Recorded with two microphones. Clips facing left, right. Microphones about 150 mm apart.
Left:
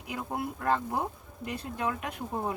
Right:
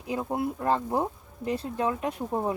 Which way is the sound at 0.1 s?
25° right (ahead or behind).